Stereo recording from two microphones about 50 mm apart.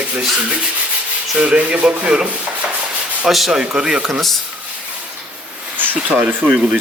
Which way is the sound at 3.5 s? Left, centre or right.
Centre.